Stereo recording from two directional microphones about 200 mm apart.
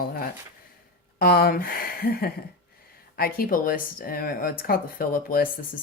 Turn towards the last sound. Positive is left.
turn(degrees=45)  # may be behind; listen again after turning